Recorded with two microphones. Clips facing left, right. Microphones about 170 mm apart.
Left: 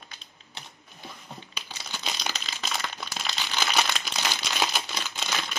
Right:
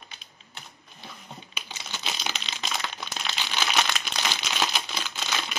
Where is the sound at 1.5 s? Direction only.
5° right (ahead or behind).